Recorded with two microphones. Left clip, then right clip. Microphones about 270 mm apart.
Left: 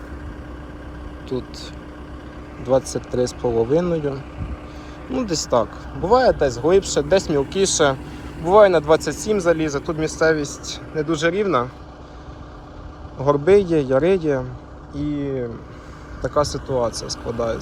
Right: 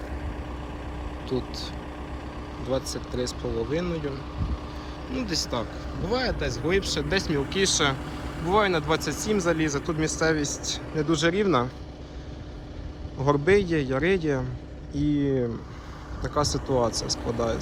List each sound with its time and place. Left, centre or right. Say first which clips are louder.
2.6 s speech: left 10 dB; centre
13.1 s speech: left 6 dB; centre
16.2 s speech: left 6 dB; centre